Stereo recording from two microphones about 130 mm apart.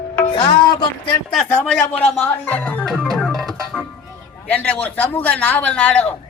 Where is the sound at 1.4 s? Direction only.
10° left (ahead or behind).